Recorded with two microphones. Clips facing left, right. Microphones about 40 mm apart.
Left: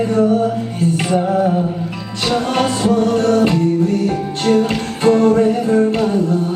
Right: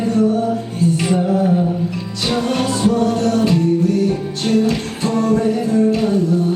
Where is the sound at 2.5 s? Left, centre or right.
Left.